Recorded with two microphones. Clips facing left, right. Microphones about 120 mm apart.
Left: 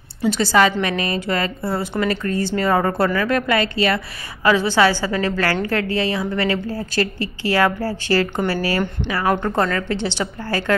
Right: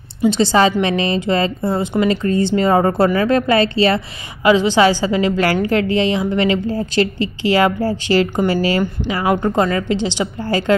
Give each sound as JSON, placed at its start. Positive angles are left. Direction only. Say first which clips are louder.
{"t": 0.2, "sound": "a woman's voice", "louder": "right 3 dB", "side_deg": -20}